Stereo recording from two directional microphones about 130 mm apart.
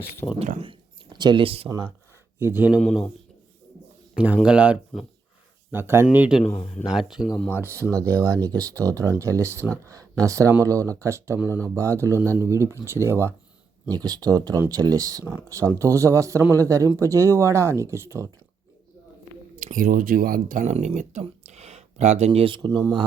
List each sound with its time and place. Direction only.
0.3 s speech: 70° right (ahead or behind)
0.6 s speech: 40° right (ahead or behind)
2.4 s speech: 15° right (ahead or behind)
4.1 s a man's voice: 10° right (ahead or behind)
7.6 s speech: 25° right (ahead or behind)
19.5 s speech: 80° right; by 23.0 s 35° right (ahead or behind)